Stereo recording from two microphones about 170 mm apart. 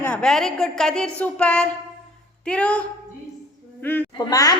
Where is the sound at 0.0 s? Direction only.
5° left (ahead or behind).